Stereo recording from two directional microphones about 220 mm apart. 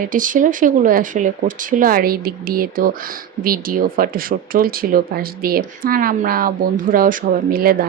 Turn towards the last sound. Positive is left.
turn(degrees=-40)  # may be behind; listen again after turning